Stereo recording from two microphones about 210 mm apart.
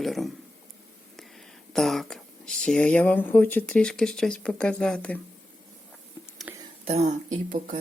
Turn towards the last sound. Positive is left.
turn(degrees=-35)  # may be behind; listen again after turning